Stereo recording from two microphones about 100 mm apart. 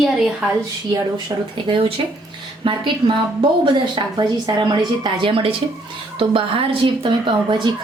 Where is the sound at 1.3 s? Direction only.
35° right (ahead or behind).